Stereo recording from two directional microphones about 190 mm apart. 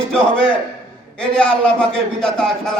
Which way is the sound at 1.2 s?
5° left (ahead or behind).